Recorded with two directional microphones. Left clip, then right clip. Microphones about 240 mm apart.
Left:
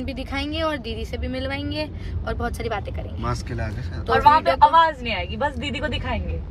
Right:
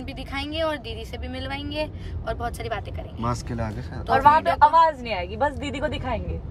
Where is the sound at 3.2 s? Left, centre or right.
Right.